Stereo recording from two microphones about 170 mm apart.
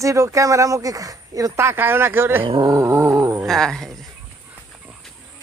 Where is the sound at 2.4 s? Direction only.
25° right (ahead or behind).